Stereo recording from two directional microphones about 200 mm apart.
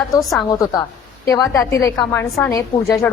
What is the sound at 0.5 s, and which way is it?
A woman's voice, 15° left (ahead or behind).